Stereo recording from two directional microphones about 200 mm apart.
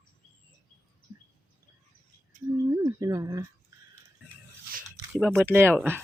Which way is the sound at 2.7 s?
20° right (ahead or behind).